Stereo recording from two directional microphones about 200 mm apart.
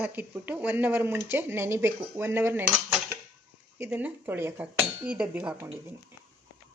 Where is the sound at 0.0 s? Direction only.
10° right (ahead or behind).